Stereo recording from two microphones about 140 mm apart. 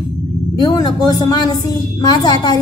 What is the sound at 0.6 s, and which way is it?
A woman's voice, 30° left (ahead or behind).